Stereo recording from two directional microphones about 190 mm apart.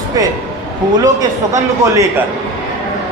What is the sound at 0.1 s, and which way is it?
Speech, 20° right (ahead or behind).